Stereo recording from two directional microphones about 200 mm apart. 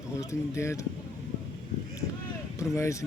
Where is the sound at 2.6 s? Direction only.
15° left (ahead or behind).